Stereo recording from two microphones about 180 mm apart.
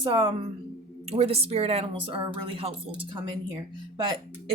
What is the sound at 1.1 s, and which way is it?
Speech, 35° right (ahead or behind).